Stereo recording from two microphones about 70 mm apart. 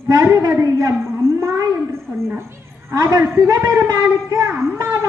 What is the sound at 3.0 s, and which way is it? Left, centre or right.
Speech, right.